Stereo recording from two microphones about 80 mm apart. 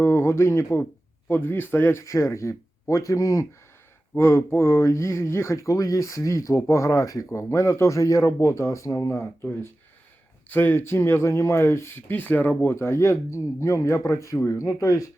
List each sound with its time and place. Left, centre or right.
0.0 s speech: left
4.1 s speech: left
12.7 s speech: left